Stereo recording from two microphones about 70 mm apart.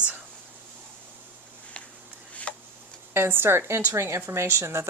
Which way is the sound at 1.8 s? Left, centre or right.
Centre.